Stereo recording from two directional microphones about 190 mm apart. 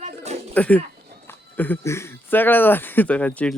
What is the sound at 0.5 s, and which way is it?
Speech, 10° left (ahead or behind).